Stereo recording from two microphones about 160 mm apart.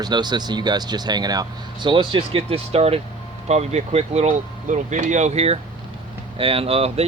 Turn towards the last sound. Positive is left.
turn(degrees=-40)  # may be behind; listen again after turning